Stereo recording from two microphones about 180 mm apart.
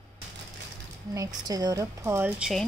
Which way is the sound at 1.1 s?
20° right (ahead or behind).